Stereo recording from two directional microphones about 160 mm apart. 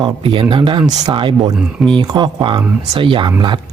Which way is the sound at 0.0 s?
30° right (ahead or behind).